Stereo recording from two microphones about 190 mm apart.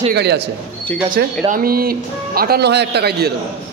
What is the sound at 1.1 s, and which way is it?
A man's voice, 50° right (ahead or behind).